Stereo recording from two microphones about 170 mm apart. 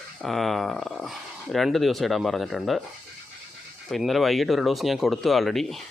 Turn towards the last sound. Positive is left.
turn(degrees=0)  # may be behind; listen again after turning